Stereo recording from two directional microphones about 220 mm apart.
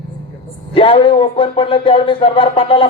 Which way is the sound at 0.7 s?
25° left (ahead or behind).